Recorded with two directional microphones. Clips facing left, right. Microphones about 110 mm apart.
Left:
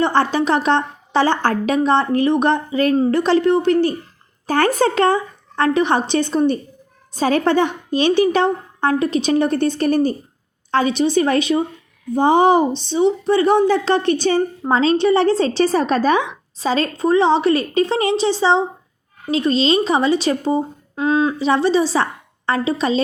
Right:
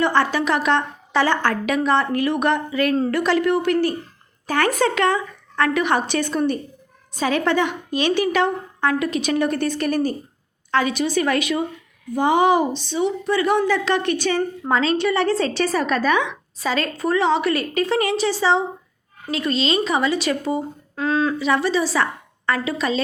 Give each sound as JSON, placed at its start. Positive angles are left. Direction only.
{"t": 0.0, "sound": "a woman's voice", "side_deg": 30}